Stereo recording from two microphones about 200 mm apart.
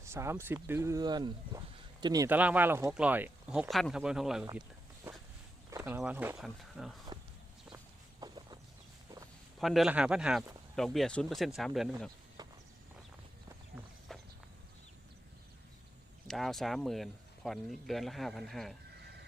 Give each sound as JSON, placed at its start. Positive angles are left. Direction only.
{"t": 0.0, "sound": "speech", "side_deg": -15}
{"t": 5.7, "sound": "speech", "side_deg": -10}
{"t": 7.1, "sound": "a sound", "side_deg": -20}
{"t": 8.2, "sound": "chicken", "side_deg": -20}
{"t": 9.6, "sound": "speech", "side_deg": 0}
{"t": 12.4, "sound": "walk", "side_deg": -20}
{"t": 14.1, "sound": "walk", "side_deg": 0}
{"t": 16.2, "sound": "speech", "side_deg": 0}